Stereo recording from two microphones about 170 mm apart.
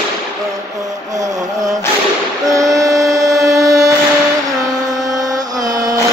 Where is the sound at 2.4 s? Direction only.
20° right (ahead or behind).